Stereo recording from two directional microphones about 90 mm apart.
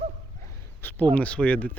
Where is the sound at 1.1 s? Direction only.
15° left (ahead or behind).